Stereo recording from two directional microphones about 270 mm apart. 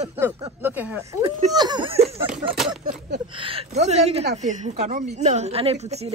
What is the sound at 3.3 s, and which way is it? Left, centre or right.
A woman's voice, centre.